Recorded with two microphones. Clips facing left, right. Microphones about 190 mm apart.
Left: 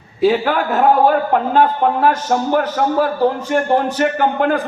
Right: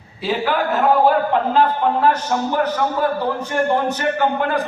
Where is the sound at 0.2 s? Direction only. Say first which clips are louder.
Left 6 dB; 50° left (ahead or behind).